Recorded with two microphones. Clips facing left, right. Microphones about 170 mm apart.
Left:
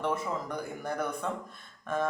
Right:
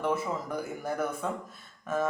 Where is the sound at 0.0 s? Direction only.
5° right (ahead or behind).